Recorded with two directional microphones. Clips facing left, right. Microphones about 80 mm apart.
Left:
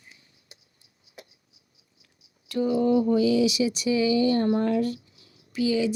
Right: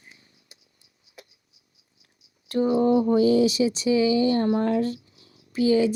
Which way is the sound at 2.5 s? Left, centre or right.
Right.